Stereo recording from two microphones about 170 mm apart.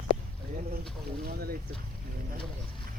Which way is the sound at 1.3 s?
65° right (ahead or behind).